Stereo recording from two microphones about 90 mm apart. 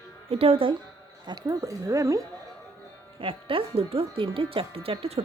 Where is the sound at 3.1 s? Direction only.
80° right.